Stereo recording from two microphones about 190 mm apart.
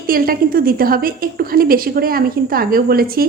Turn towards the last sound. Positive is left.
turn(degrees=-50)  # may be behind; listen again after turning